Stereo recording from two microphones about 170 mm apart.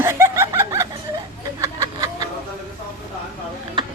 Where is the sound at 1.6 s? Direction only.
20° right (ahead or behind).